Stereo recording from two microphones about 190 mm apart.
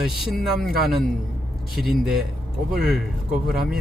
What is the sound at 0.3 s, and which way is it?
Speech, centre (ahead or behind).